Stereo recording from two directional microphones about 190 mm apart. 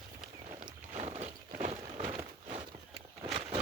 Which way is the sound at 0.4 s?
35° right (ahead or behind).